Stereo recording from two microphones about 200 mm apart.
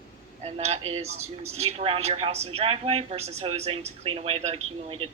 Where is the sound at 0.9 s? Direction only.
30° right (ahead or behind).